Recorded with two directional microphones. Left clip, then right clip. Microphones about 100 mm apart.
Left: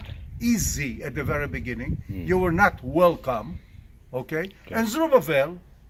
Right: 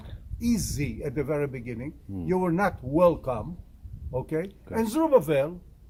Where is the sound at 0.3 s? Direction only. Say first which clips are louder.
Left 3 dB; 40° right (ahead or behind).